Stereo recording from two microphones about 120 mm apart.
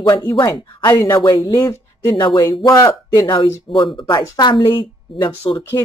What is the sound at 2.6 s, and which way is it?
Speech, 30° left (ahead or behind).